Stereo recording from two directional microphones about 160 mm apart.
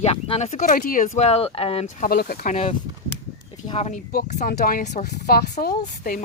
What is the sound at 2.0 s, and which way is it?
Speech, 70° left (ahead or behind).